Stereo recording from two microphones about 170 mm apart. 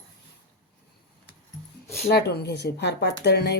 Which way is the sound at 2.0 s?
70° left (ahead or behind).